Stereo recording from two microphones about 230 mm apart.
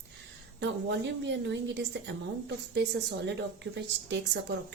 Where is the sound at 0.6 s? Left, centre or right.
Right.